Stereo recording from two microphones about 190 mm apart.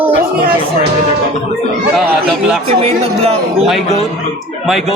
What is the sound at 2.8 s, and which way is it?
Speech, 30° right (ahead or behind).